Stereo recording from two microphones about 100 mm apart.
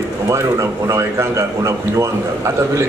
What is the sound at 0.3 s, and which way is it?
A man's voice, 30° right (ahead or behind).